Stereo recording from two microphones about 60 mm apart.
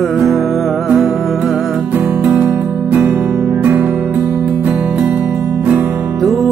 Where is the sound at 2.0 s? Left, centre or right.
Centre.